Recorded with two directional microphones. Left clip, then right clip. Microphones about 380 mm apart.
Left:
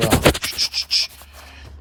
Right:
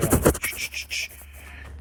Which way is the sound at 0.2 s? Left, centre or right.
Left.